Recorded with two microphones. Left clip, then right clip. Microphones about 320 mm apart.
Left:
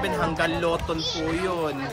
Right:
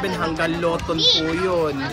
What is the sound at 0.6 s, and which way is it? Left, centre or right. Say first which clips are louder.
Speech: right 4 dB; centre.